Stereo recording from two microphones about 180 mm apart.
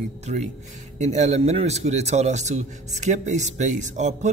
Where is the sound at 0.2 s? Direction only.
40° right (ahead or behind).